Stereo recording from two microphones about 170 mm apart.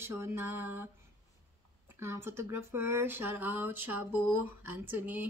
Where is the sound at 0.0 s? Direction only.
15° right (ahead or behind).